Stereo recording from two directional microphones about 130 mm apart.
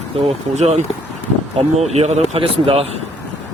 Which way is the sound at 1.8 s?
55° right (ahead or behind).